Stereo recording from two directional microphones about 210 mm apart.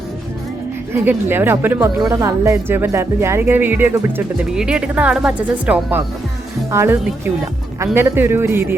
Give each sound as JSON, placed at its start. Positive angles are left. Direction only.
{"t": 0.9, "sound": "a woman's voice", "side_deg": -10}